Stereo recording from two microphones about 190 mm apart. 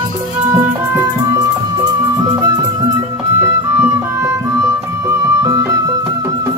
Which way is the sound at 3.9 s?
15° right (ahead or behind).